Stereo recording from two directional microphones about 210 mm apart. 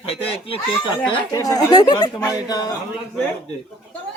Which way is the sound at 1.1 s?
20° left (ahead or behind).